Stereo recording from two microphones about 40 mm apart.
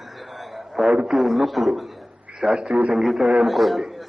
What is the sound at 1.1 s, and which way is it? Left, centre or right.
A man's voice, centre.